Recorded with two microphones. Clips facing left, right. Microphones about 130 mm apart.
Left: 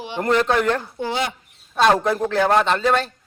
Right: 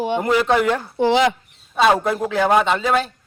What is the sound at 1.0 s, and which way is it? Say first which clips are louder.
Speech: right 8 dB; 90° right.